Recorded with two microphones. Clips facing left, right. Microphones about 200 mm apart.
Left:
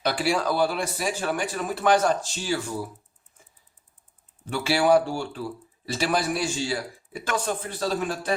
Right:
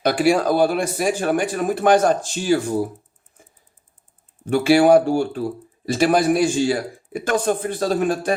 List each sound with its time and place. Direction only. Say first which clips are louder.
0.0 s speech: right 7 dB; 50° right (ahead or behind)
4.4 s speech: right 8 dB; 50° right (ahead or behind)